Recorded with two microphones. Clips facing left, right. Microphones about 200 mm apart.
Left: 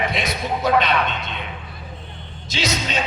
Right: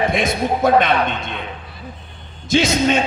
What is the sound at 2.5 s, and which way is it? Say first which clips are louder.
Speech: right 10 dB; 50° right (ahead or behind).